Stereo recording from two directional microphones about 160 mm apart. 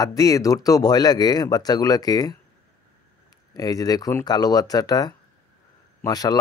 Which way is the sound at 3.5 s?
25° left (ahead or behind).